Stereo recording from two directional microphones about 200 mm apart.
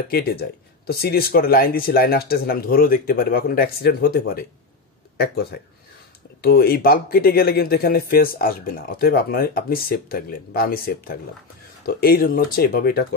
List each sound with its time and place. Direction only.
0.1 s speech: 50° left (ahead or behind)